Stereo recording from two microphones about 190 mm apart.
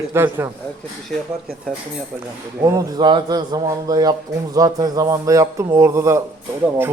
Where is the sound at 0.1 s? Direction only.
15° right (ahead or behind).